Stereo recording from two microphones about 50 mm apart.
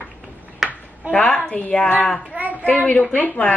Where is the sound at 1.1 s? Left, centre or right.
Left.